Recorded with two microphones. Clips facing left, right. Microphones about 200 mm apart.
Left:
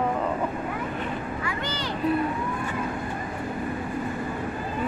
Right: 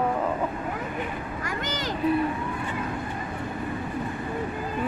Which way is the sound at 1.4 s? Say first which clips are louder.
Even; 45° right (ahead or behind).